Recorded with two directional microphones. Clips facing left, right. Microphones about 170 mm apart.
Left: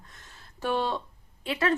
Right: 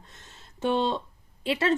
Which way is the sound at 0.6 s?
20° right (ahead or behind).